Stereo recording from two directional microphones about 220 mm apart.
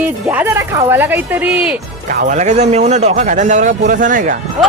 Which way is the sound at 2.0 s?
35° right (ahead or behind).